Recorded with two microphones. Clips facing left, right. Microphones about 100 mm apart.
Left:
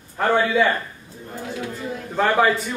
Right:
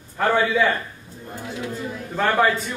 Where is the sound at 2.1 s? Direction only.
5° left (ahead or behind).